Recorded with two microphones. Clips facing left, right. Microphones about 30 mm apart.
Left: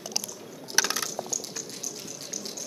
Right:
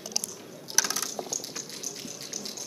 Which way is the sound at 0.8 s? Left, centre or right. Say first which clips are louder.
Left 2 dB; left.